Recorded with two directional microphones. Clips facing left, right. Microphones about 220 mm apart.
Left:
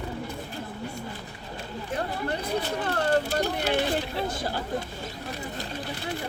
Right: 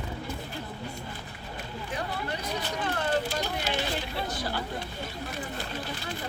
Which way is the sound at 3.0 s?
60° left (ahead or behind).